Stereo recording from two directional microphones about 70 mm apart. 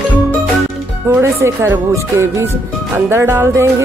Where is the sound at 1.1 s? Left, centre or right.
Right.